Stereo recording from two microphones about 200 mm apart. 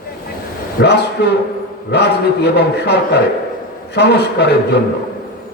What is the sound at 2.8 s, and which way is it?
Speech, 55° left (ahead or behind).